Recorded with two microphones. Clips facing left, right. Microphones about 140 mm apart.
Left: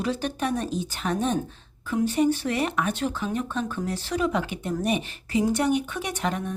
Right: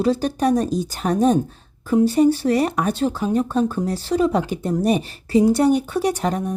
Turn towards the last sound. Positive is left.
turn(degrees=-40)  # may be behind; listen again after turning